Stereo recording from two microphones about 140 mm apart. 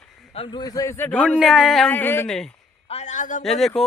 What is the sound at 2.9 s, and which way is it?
Speech, 55° left (ahead or behind).